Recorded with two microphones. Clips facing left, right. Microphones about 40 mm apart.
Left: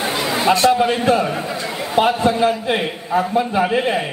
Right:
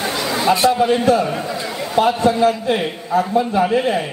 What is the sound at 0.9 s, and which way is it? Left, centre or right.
Speech, left.